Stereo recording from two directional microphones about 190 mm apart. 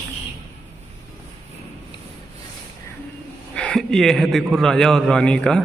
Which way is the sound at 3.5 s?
5° left (ahead or behind).